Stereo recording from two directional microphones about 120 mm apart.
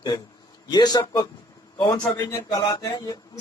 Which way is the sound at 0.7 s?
35° left (ahead or behind).